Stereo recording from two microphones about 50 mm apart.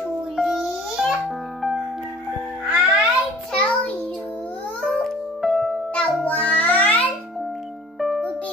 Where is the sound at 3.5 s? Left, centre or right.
Left.